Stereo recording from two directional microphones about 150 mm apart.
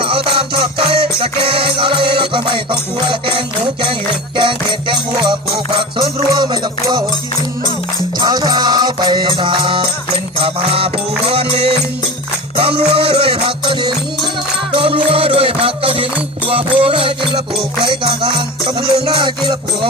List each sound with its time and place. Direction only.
0.0 s music: 35° right (ahead or behind)
8.2 s music: 25° right (ahead or behind)